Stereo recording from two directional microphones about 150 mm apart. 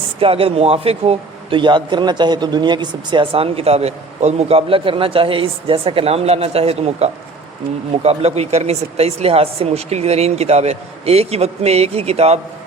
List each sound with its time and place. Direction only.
0.2 s a man's voice: 40° right (ahead or behind)